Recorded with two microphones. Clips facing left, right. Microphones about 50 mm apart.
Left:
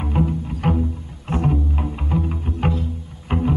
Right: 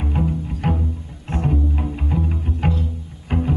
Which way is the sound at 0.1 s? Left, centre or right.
Centre.